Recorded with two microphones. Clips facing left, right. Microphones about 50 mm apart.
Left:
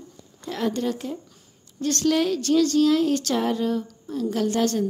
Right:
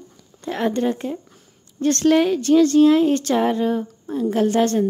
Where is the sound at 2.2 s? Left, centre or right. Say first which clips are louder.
Right 5 dB; right.